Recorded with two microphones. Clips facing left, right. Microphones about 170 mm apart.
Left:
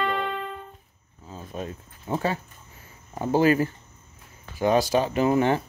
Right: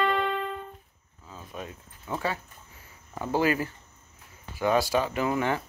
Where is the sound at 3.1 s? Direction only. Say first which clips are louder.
Left 5 dB; 25° left (ahead or behind).